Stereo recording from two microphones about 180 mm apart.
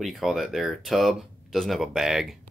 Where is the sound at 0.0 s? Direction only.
Centre (ahead or behind).